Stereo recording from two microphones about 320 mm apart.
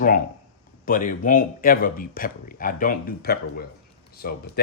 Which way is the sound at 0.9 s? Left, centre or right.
Left.